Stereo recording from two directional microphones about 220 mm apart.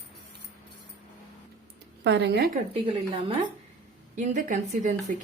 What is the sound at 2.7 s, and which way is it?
A woman's voice, 25° right (ahead or behind).